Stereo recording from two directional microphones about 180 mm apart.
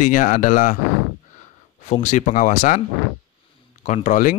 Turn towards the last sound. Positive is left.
turn(degrees=45)  # may be behind; listen again after turning